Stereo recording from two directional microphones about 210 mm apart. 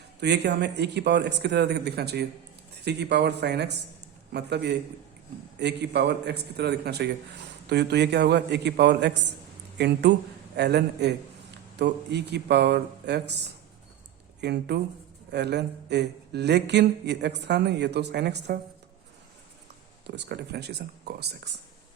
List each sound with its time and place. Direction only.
0.2 s speech: 55° right (ahead or behind)
14.4 s speech: 55° right (ahead or behind)
20.1 s speech: 55° right (ahead or behind)